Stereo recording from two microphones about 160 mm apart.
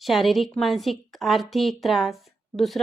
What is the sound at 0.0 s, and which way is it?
A woman's voice, centre (ahead or behind).